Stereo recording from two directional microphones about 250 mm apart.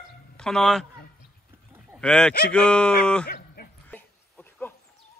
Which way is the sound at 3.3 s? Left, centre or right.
Left.